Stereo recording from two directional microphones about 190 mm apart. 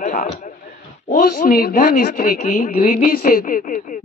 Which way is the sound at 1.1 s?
50° left (ahead or behind).